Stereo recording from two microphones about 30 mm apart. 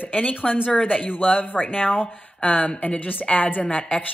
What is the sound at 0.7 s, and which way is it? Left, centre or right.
Speech, left.